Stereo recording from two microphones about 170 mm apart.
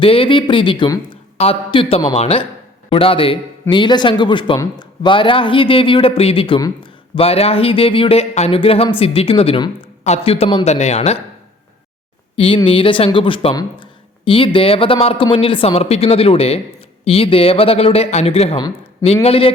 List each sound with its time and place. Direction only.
0.0 s a man's voice: 30° left (ahead or behind)
12.6 s a man's voice: 30° left (ahead or behind)